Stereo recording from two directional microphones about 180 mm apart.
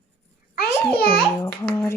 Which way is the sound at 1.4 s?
15° left (ahead or behind).